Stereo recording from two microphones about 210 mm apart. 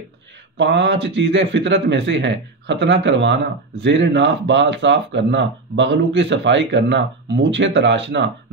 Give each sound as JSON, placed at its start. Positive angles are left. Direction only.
{"t": 0.6, "sound": "speech", "side_deg": -55}